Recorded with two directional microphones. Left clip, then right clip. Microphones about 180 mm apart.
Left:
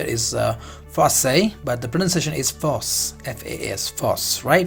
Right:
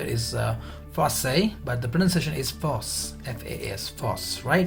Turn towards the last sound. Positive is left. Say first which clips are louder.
# left 7 dB
turn(degrees=50)  # may be behind; listen again after turning